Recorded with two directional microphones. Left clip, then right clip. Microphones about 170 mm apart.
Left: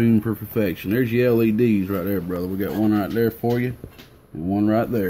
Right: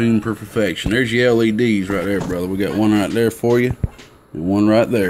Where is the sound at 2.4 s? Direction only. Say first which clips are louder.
Right 5 dB; 55° right (ahead or behind).